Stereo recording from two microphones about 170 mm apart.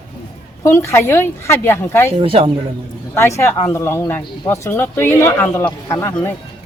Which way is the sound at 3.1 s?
15° left (ahead or behind).